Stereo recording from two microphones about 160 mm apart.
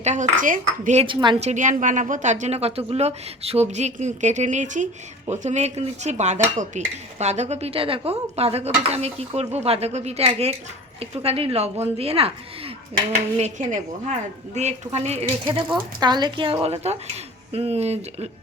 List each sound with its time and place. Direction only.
0.0 s a woman's voice: 50° right (ahead or behind)
1.0 s speech: 30° right (ahead or behind)
1.4 s a woman's voice: 45° right (ahead or behind)
13.3 s a woman's voice: 50° right (ahead or behind)
16.0 s speech: 25° right (ahead or behind); by 18.3 s 40° right (ahead or behind)